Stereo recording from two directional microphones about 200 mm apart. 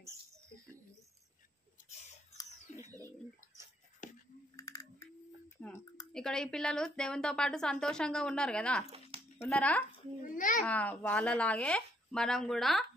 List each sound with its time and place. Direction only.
2.7 s bird: 35° left (ahead or behind)
4.0 s a sound: 40° left (ahead or behind)
4.6 s typing: 20° left (ahead or behind)
5.6 s a sound: 5° left (ahead or behind)
6.1 s a woman's voice: 5° left (ahead or behind)
10.3 s a child's voice: 40° left (ahead or behind)
10.6 s a woman's voice: 5° left (ahead or behind)